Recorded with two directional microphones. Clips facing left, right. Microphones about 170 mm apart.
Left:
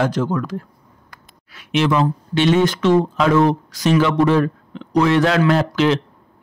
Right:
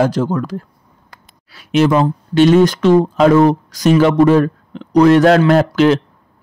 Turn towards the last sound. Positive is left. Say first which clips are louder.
# right 5 dB
turn(degrees=-45)  # may be behind; listen again after turning